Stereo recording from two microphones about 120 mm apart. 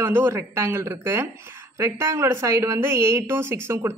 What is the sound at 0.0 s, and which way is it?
A woman's voice, 20° right (ahead or behind).